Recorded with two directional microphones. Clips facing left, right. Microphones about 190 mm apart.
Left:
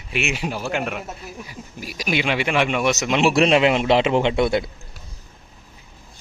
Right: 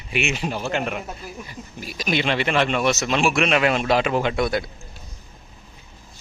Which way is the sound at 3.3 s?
30° left (ahead or behind).